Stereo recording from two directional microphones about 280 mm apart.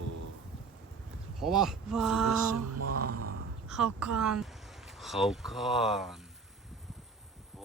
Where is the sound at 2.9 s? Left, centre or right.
Right.